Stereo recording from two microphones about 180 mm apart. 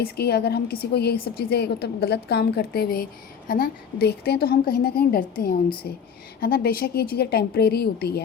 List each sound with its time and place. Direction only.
0.0 s a woman's voice: 60° left (ahead or behind)